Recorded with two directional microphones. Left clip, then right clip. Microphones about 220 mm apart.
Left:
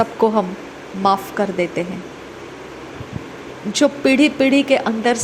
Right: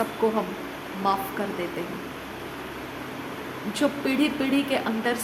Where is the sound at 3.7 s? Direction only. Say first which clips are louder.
Left 10 dB; 30° left (ahead or behind).